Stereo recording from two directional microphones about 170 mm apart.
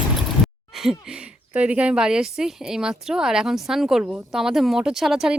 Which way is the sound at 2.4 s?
5° right (ahead or behind).